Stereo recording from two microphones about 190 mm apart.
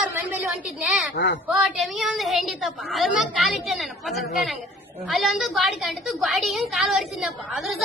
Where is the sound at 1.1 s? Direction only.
65° left (ahead or behind).